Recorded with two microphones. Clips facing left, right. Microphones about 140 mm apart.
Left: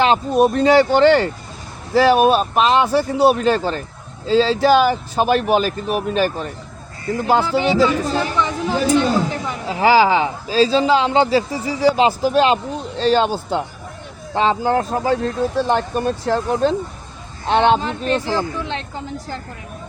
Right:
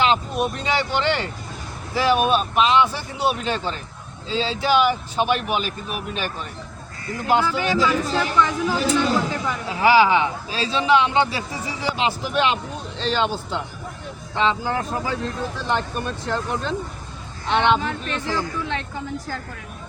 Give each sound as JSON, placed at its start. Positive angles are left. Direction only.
{"t": 0.0, "sound": "speech", "side_deg": 40}
{"t": 9.6, "sound": "speech", "side_deg": 35}